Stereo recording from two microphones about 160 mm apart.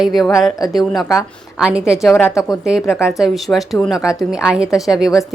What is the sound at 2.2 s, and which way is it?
Speech, 20° left (ahead or behind).